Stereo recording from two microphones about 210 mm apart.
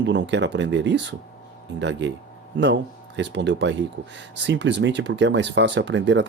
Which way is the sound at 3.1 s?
55° right (ahead or behind).